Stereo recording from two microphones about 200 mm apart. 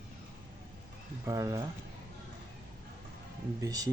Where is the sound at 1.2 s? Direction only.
15° right (ahead or behind).